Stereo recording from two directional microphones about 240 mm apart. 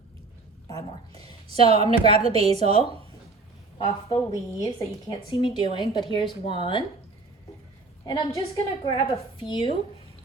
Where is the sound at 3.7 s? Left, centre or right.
Centre.